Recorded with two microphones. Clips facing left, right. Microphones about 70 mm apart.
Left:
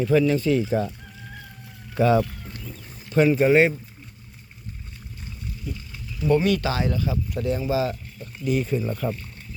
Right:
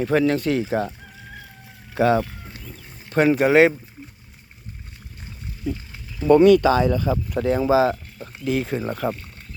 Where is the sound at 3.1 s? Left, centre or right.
Right.